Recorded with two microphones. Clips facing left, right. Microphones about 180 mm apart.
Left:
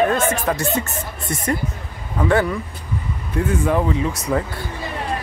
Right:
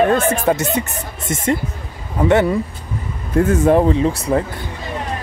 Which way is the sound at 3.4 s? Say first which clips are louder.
Right 6 dB; 45° right (ahead or behind).